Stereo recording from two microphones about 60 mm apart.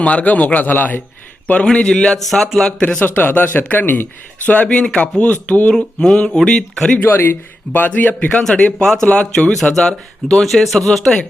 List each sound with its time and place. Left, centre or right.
0.0 s a man's voice: left
1.6 s speech: centre
2.1 s speech: centre
2.8 s a man's voice: left
5.7 s speech: centre
7.0 s a man's voice: left
8.8 s speech: centre